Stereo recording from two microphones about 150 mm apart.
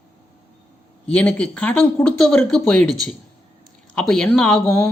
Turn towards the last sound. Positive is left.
turn(degrees=5)  # may be behind; listen again after turning